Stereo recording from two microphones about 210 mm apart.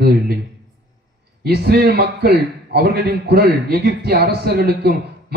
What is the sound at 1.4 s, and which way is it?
A man's voice, 50° right (ahead or behind).